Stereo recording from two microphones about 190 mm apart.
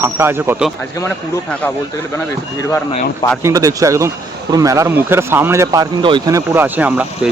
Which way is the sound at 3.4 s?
15° right (ahead or behind).